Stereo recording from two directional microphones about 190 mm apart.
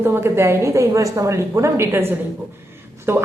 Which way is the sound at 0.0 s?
15° right (ahead or behind).